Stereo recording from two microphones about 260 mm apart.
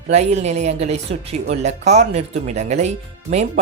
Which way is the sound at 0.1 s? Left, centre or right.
Right.